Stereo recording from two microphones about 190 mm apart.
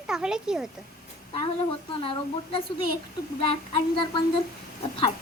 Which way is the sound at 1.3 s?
30° left (ahead or behind).